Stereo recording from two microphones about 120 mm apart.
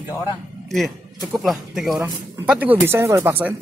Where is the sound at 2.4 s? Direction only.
10° right (ahead or behind).